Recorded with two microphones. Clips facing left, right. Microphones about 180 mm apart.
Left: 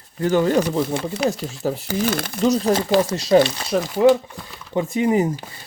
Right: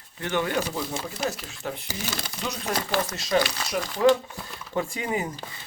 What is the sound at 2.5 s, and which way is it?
Speech, 30° left (ahead or behind).